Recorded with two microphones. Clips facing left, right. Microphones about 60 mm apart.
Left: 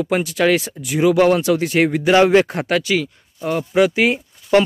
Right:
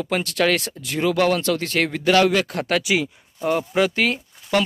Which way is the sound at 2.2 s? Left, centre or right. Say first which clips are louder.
Left 6 dB; left.